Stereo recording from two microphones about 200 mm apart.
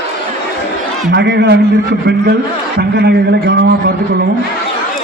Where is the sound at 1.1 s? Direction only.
60° right (ahead or behind).